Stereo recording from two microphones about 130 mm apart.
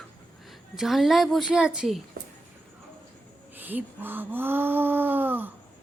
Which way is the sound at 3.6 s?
15° right (ahead or behind).